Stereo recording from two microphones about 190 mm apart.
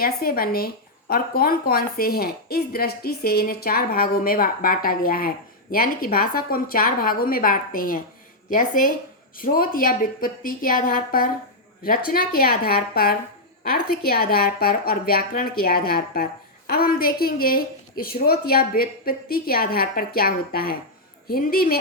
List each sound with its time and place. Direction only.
0.0 s speech: 50° left (ahead or behind)